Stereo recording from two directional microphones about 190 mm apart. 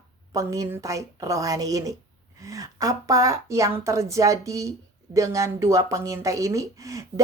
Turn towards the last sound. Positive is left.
turn(degrees=-15)  # may be behind; listen again after turning